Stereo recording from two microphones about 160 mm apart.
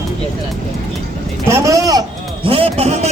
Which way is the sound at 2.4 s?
35° right (ahead or behind).